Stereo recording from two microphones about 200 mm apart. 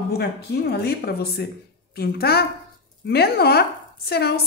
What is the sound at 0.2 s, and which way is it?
Speech, 55° left (ahead or behind).